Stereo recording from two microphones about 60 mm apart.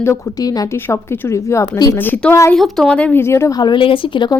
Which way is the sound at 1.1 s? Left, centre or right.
Left.